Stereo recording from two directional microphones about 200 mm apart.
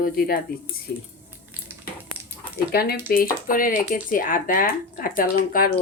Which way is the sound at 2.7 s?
50° left (ahead or behind).